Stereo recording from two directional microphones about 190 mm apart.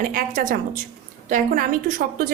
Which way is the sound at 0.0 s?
50° right (ahead or behind).